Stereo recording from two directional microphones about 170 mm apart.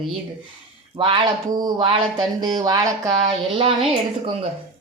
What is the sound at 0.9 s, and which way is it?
Speech, 30° right (ahead or behind).